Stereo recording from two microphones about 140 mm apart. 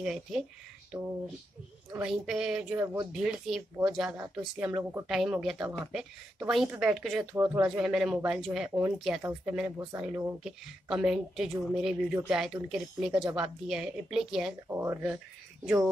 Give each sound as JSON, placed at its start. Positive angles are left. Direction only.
{"t": 0.0, "sound": "a woman's voice", "side_deg": -5}
{"t": 2.0, "sound": "a woman's voice", "side_deg": -5}
{"t": 7.3, "sound": "speech", "side_deg": -20}
{"t": 7.6, "sound": "a woman's voice", "side_deg": -5}
{"t": 14.7, "sound": "speech", "side_deg": -15}